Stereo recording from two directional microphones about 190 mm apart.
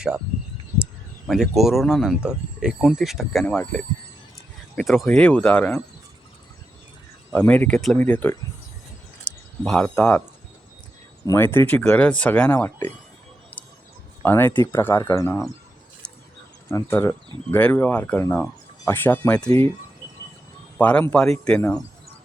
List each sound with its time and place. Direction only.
1.3 s speech: centre (ahead or behind)
7.3 s speech: 10° left (ahead or behind)
11.3 s speech: 10° left (ahead or behind)
13.6 s a sound: 10° left (ahead or behind)
14.2 s speech: 10° left (ahead or behind)
16.6 s speech: 15° left (ahead or behind)
20.7 s speech: 10° left (ahead or behind)